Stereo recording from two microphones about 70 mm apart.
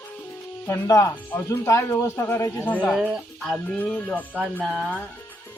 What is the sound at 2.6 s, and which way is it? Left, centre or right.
Speech, left.